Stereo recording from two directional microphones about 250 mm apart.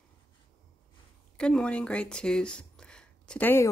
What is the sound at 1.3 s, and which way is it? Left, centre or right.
Speech, centre.